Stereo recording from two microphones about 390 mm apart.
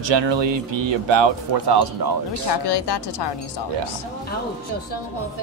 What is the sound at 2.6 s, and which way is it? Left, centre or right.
Speech, left.